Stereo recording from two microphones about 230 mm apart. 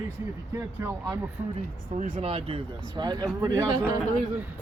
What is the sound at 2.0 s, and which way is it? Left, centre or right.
Speech, right.